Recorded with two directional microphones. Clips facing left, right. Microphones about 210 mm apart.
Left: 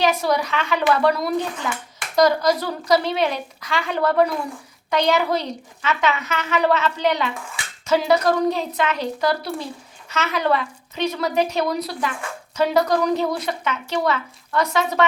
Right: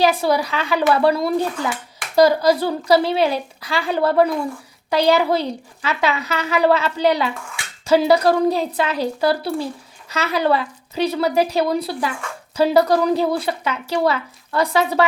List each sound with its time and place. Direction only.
0.0 s a woman's voice: 30° right (ahead or behind)